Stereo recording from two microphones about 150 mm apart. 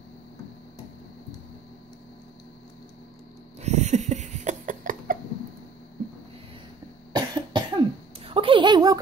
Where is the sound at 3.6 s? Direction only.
50° right (ahead or behind).